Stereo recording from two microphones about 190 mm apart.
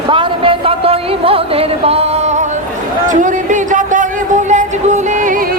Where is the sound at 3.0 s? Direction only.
40° right (ahead or behind).